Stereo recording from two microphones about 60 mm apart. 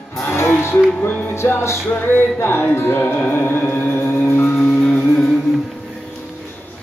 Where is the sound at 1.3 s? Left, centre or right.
Left.